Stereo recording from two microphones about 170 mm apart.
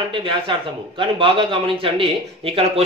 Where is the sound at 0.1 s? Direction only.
30° right (ahead or behind).